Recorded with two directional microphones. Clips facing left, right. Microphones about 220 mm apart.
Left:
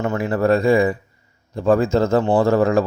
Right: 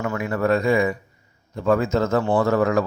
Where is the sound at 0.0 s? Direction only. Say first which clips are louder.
Left 4 dB; 30° left (ahead or behind).